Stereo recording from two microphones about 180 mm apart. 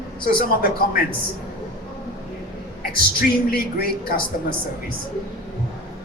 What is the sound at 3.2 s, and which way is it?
Speech, 55° left (ahead or behind).